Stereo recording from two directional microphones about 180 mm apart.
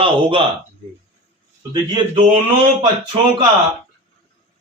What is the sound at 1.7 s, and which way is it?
Speech, 25° right (ahead or behind).